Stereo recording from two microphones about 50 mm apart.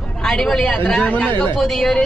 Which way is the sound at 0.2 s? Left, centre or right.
Centre.